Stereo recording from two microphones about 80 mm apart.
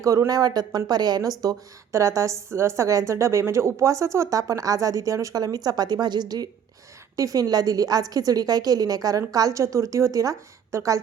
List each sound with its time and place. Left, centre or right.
0.0 s a woman's voice: right
1.4 s a woman's voice: right